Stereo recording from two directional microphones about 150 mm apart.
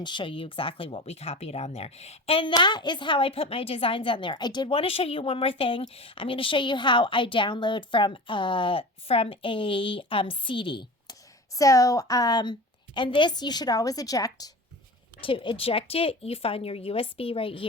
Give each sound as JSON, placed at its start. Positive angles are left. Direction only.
{"t": 0.0, "sound": "a woman's voice", "side_deg": 30}
{"t": 2.5, "sound": "a woman's voice", "side_deg": 30}
{"t": 15.2, "sound": "a woman's voice", "side_deg": 35}